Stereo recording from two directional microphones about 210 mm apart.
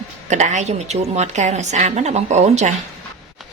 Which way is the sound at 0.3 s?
35° right (ahead or behind).